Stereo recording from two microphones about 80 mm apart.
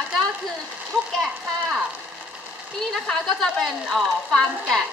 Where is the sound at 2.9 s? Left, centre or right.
Centre.